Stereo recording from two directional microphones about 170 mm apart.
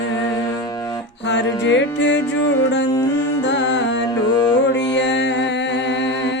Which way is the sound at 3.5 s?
90° left.